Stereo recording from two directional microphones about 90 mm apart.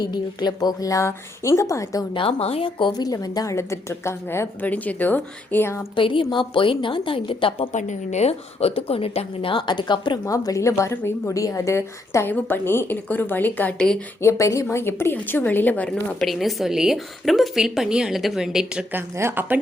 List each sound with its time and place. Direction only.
0.0 s speech: 50° left (ahead or behind)
2.1 s speech: 90° left; by 2.9 s 70° left (ahead or behind)
3.0 s speech: 45° left (ahead or behind)
4.6 s a woman's voice: 15° left (ahead or behind)
6.0 s a woman's voice: 70° left (ahead or behind)
8.6 s a woman's voice: 90° left; by 10.2 s 60° left (ahead or behind)
10.2 s a woman's voice: 40° left (ahead or behind); by 13.7 s 20° left (ahead or behind)
13.7 s a woman's voice: 5° left (ahead or behind)
14.2 s a woman's voice: 35° left (ahead or behind); by 16.0 s 15° left (ahead or behind)
16.2 s a woman's voice: centre (ahead or behind)
18.9 s speech: 25° right (ahead or behind)